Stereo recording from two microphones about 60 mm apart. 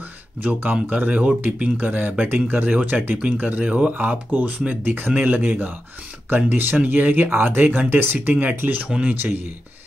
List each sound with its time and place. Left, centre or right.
0.4 s speech: right